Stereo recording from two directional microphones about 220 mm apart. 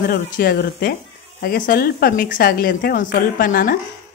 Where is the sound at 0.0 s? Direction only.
45° left (ahead or behind).